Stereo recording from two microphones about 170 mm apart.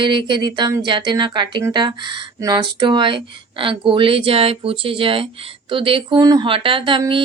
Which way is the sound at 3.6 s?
30° right (ahead or behind).